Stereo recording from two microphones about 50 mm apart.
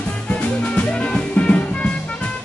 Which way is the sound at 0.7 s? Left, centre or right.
Centre.